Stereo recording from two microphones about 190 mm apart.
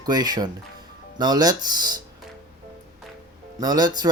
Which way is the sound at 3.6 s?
20° right (ahead or behind).